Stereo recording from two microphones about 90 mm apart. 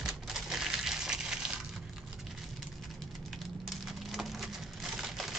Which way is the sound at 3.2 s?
Centre (ahead or behind).